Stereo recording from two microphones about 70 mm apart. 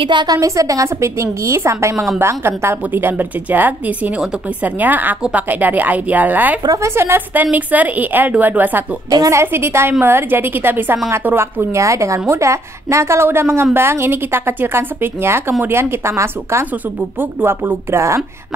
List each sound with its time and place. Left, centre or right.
0.1 s a woman's voice: right
0.4 s a woman's voice: right
6.8 s a woman's voice: right
9.3 s a woman's voice: right
11.7 s a woman's voice: right
17.2 s a woman's voice: right
17.9 s a woman's voice: right